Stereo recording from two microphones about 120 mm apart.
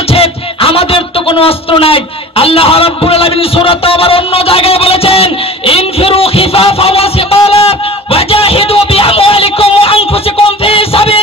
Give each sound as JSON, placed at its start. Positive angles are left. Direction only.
{"t": 0.1, "sound": "music", "side_deg": 50}